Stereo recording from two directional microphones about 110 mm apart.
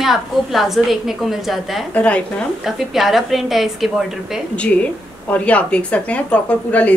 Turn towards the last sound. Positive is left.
turn(degrees=10)  # may be behind; listen again after turning